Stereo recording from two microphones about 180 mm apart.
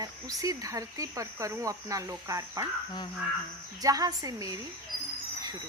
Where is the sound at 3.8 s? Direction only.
20° right (ahead or behind).